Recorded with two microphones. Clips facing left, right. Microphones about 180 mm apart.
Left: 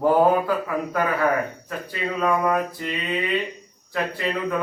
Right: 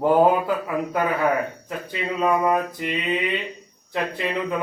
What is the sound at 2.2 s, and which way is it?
Speech, 20° right (ahead or behind).